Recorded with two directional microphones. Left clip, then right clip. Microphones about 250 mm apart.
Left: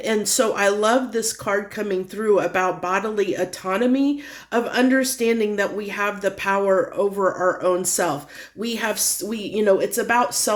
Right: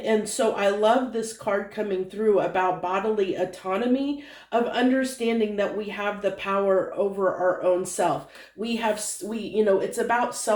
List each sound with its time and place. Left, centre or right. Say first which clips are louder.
0.0 s speech: left 3 dB; left